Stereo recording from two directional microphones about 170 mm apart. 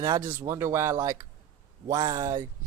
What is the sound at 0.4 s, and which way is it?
Speech, 15° right (ahead or behind).